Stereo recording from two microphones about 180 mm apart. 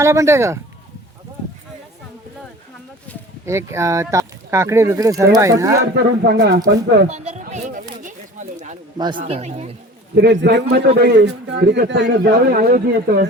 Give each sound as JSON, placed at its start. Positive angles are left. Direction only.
{"t": 0.0, "sound": "speech", "side_deg": -15}
{"t": 3.4, "sound": "speech", "side_deg": -15}
{"t": 6.0, "sound": "a man's voice", "side_deg": -65}
{"t": 7.1, "sound": "a sound", "side_deg": -40}
{"t": 9.0, "sound": "speech", "side_deg": -25}
{"t": 9.2, "sound": "speech", "side_deg": -35}
{"t": 10.2, "sound": "a man's voice", "side_deg": -70}